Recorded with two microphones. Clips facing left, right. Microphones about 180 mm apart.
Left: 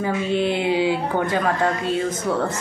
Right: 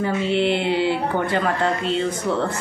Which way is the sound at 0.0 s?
10° left (ahead or behind).